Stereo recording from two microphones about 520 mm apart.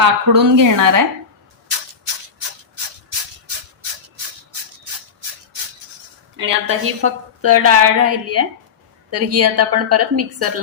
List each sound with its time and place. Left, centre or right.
0.0 s a woman's voice: right
6.3 s a woman's voice: right